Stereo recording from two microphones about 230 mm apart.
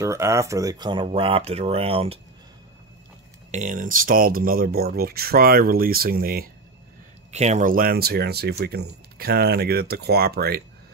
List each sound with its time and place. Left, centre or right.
0.0 s speech: centre
3.5 s speech: right
7.2 s speech: right